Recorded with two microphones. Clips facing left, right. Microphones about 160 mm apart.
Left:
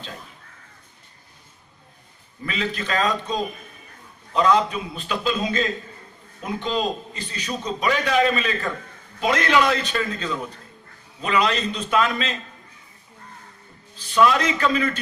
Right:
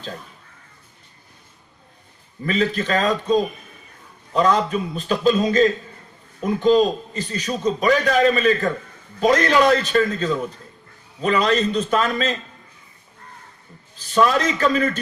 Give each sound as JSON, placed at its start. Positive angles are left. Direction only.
{"t": 2.5, "sound": "a man's voice", "side_deg": -40}
{"t": 4.4, "sound": "a man's voice", "side_deg": -40}
{"t": 14.1, "sound": "a man's voice", "side_deg": -40}